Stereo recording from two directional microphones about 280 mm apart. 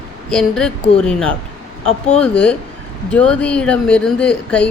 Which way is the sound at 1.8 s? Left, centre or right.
Left.